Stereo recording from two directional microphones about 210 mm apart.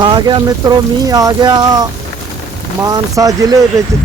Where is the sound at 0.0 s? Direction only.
20° right (ahead or behind).